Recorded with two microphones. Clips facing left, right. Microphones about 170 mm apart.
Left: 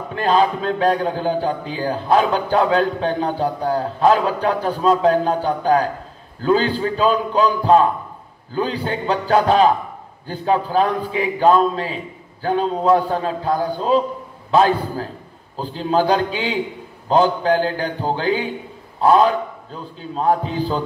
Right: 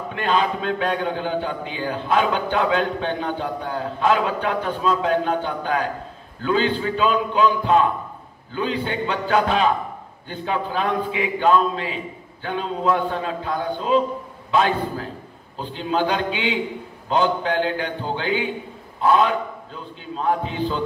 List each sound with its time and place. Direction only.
0.1 s a man's voice: 35° left (ahead or behind)